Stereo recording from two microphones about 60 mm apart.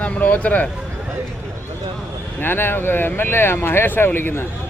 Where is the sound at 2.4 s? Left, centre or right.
Left.